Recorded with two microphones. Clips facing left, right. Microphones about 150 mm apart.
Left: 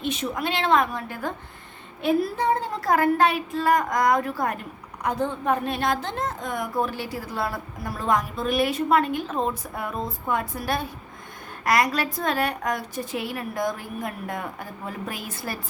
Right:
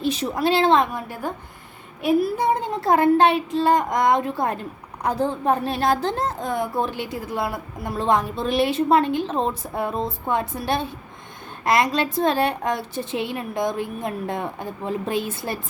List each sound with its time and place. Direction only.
0.0 s speech: 35° right (ahead or behind)
2.0 s a woman's voice: 10° right (ahead or behind); by 15.5 s 25° right (ahead or behind)